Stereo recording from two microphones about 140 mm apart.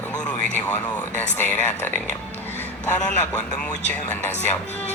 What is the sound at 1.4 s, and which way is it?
Speech, 15° left (ahead or behind).